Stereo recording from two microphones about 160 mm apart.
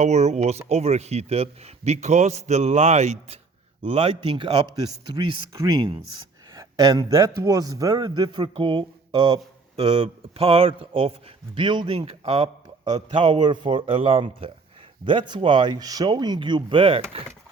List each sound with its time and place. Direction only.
0.0 s a man's voice: 45° right (ahead or behind)
13.2 s a man's voice: 30° right (ahead or behind)